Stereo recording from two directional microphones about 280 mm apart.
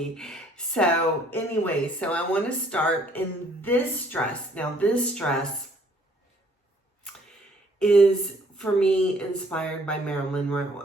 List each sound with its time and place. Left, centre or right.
0.0 s speech: centre
7.8 s speech: centre